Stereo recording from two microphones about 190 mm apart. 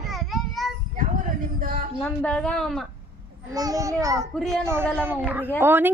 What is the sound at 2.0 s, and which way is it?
Speech, 5° left (ahead or behind).